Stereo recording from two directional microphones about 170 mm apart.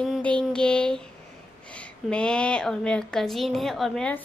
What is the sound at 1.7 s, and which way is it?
A woman's voice, 5° left (ahead or behind).